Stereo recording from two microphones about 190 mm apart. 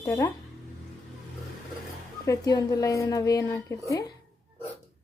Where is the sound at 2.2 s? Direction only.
20° left (ahead or behind).